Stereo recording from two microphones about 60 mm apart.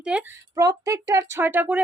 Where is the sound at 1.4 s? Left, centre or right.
Right.